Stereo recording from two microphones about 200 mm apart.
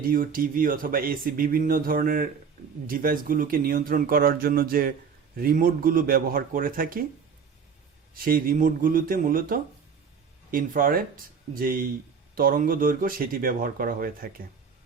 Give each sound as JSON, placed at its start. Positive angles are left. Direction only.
{"t": 0.1, "sound": "speech", "side_deg": -45}
{"t": 8.1, "sound": "speech", "side_deg": -45}